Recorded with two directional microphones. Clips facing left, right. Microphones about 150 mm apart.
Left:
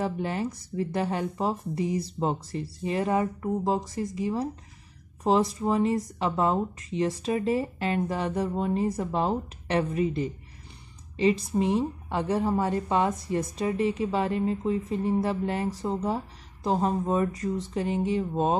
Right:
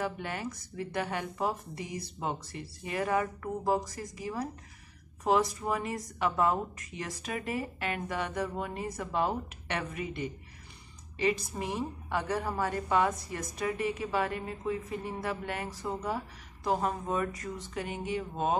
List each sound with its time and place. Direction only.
0.0 s speech: 30° left (ahead or behind)